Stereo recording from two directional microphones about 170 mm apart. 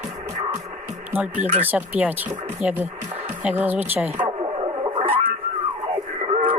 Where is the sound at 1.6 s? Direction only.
10° right (ahead or behind).